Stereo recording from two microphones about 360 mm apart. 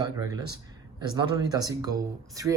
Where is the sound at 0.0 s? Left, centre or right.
Centre.